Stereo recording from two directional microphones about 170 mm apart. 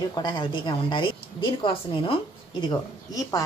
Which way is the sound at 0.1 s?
25° left (ahead or behind).